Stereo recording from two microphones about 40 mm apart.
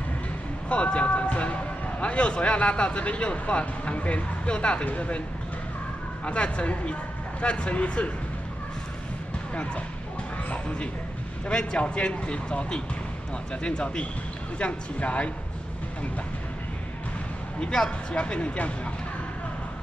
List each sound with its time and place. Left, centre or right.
0.7 s speech: left
6.2 s speech: left
10.5 s speech: left
17.6 s speech: left